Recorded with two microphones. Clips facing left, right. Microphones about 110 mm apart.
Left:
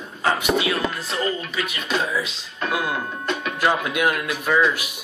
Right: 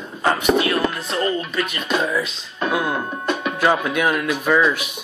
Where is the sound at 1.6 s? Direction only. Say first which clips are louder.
Right 3 dB; 50° right (ahead or behind).